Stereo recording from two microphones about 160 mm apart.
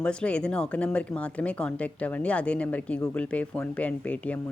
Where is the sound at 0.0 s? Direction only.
5° left (ahead or behind).